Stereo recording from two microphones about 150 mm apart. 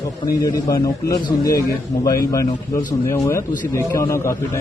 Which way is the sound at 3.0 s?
15° left (ahead or behind).